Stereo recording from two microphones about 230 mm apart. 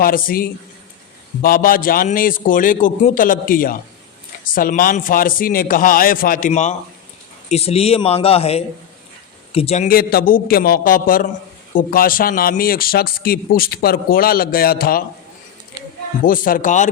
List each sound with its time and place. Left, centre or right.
0.0 s a man's voice: left
16.2 s a man's voice: left